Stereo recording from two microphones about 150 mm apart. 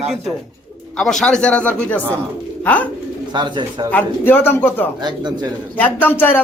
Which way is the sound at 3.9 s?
15° left (ahead or behind).